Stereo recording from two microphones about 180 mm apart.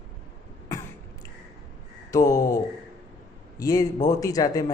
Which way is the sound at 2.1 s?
20° left (ahead or behind).